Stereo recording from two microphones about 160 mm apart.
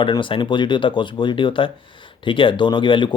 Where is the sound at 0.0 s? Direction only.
30° left (ahead or behind).